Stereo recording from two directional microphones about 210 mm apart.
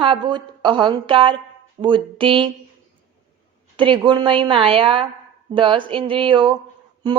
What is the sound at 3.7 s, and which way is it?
A woman's voice, 25° right (ahead or behind).